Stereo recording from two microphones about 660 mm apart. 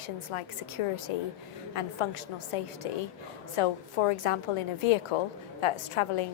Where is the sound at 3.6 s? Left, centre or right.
Left.